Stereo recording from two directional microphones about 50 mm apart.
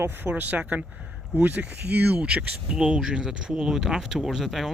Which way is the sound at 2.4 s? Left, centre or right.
Centre.